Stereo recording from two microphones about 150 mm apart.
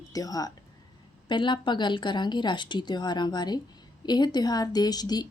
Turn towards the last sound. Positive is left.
turn(degrees=25)  # may be behind; listen again after turning